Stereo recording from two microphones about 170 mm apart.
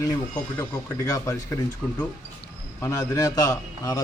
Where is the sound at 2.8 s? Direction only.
20° left (ahead or behind).